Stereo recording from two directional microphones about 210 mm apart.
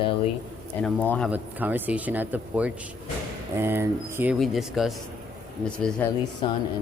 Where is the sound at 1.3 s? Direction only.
10° right (ahead or behind).